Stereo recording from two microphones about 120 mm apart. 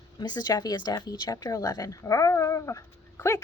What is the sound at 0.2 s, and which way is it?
A woman's voice, 35° left (ahead or behind).